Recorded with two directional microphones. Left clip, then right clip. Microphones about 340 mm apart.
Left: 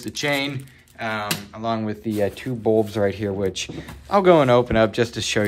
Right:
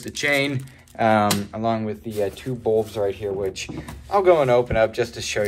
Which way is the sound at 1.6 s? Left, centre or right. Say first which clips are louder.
Even; centre.